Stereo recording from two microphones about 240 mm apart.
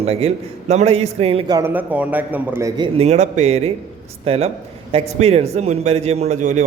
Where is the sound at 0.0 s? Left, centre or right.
Right.